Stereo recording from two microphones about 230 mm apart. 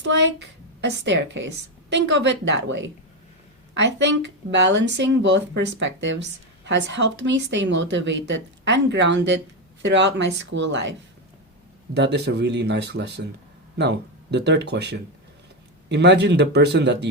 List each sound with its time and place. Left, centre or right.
0.0 s a woman's voice: right
11.9 s a woman's voice: right